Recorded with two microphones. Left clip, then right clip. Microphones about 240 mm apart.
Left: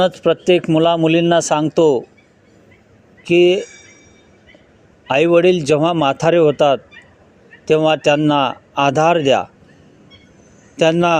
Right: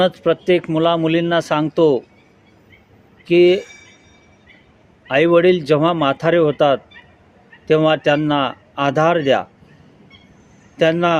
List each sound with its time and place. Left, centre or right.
0.0 s a man's voice: left
3.2 s a man's voice: left
5.0 s a man's voice: left
10.8 s speech: left